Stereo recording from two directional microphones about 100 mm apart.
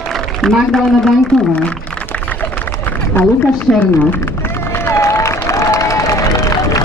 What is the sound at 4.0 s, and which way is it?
Applause, 20° left (ahead or behind).